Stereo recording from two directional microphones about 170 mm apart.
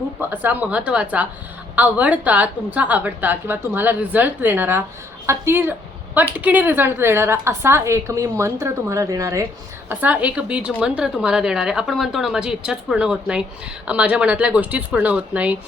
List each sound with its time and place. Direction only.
0.2 s a woman's voice: 10° right (ahead or behind)